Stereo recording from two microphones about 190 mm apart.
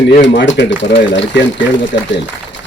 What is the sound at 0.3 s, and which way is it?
A man's voice, 70° left (ahead or behind).